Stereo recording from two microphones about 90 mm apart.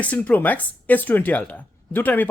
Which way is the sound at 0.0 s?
15° left (ahead or behind).